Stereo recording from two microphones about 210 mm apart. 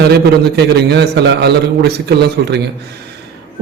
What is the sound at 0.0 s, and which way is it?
A man's voice, 50° right (ahead or behind).